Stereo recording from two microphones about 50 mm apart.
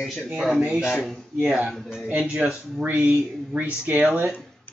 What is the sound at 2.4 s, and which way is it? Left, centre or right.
Speech, right.